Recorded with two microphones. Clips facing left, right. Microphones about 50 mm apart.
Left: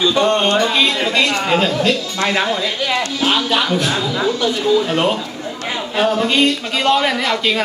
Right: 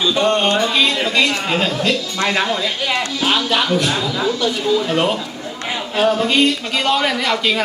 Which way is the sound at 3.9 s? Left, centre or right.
Centre.